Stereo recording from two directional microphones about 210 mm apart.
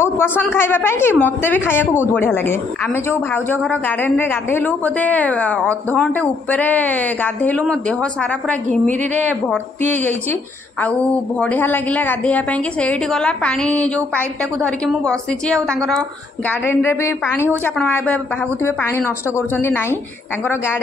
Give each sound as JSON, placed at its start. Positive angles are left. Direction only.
{"t": 0.0, "sound": "a woman's voice", "side_deg": 10}
{"t": 8.6, "sound": "a woman's voice", "side_deg": -35}
{"t": 10.8, "sound": "a woman's voice", "side_deg": 5}